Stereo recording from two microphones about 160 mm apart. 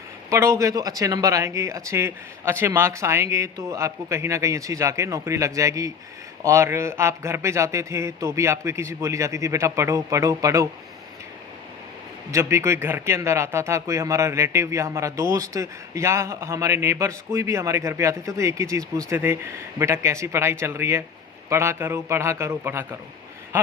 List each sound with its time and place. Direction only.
0.3 s speech: 20° right (ahead or behind)
12.3 s speech: 15° right (ahead or behind)